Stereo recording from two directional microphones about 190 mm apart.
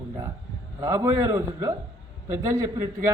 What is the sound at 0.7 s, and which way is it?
A man's voice, 15° right (ahead or behind).